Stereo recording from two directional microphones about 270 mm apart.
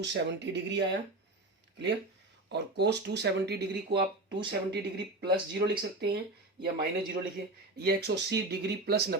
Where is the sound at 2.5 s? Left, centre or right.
Right.